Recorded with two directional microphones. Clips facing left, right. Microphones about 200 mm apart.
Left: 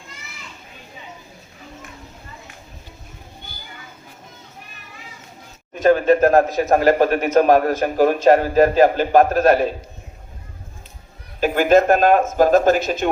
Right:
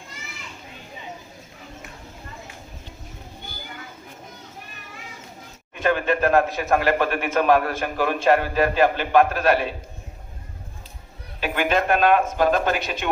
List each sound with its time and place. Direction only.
5.7 s a man's voice: 40° left (ahead or behind)
11.3 s a man's voice: 40° left (ahead or behind)